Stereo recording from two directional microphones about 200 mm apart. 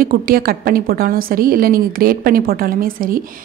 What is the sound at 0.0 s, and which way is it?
A woman's voice, 45° right (ahead or behind).